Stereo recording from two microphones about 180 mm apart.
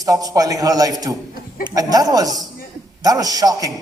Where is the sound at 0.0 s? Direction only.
20° right (ahead or behind).